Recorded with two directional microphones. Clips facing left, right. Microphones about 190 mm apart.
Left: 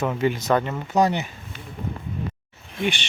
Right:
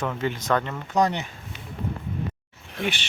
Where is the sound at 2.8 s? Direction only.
5° right (ahead or behind).